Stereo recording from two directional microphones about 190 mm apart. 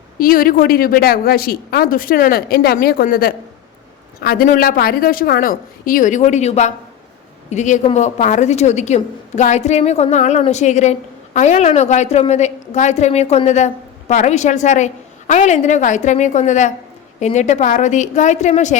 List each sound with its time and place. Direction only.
0.2 s a woman's voice: 50° left (ahead or behind)